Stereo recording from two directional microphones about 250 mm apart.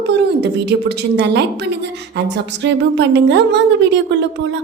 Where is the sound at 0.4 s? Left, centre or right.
Right.